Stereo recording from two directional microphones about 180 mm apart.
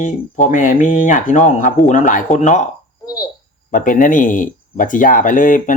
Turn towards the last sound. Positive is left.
turn(degrees=45)  # may be behind; listen again after turning